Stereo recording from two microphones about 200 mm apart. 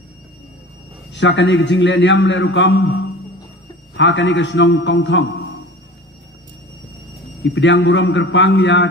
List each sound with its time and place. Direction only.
1.1 s a man's voice: 65° left (ahead or behind)
7.4 s a man's voice: 65° left (ahead or behind)